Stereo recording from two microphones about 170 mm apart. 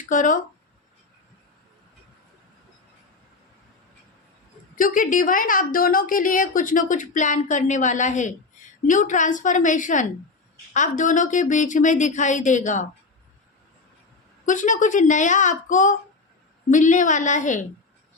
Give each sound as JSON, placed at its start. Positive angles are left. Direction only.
{"t": 0.0, "sound": "speech", "side_deg": 50}
{"t": 4.8, "sound": "a woman's voice", "side_deg": 50}
{"t": 14.4, "sound": "a woman's voice", "side_deg": 50}